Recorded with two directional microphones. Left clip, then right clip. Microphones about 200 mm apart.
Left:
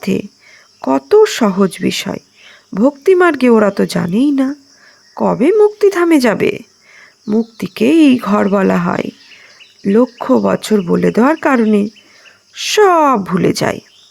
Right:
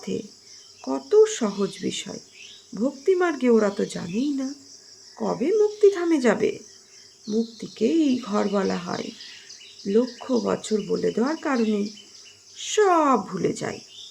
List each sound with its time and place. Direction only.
0.8 s speech: 45° left (ahead or behind)